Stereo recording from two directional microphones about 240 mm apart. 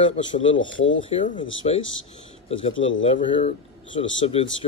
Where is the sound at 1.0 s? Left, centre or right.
Left.